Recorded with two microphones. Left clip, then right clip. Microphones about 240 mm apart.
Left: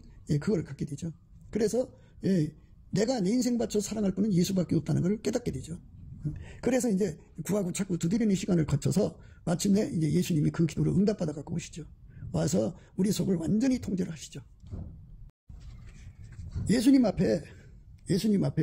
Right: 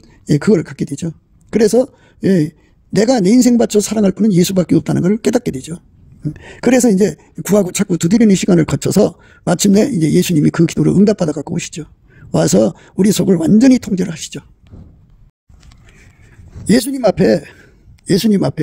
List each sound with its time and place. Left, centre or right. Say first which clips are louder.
0.0 s speech: right 17 dB; right
17.0 s a man's voice: right 16 dB; right